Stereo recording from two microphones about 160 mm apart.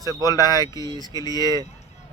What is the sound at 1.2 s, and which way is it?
Speech, 25° left (ahead or behind).